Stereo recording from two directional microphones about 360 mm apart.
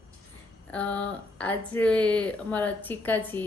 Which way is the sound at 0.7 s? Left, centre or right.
Centre.